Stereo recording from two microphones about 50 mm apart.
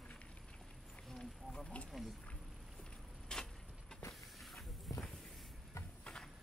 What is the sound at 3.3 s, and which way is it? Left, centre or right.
Vehicle, centre.